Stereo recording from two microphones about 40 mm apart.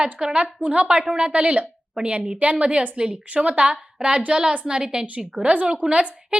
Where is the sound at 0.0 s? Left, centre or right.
Centre.